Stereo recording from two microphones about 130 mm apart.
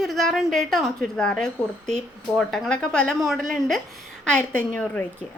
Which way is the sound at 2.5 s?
10° left (ahead or behind).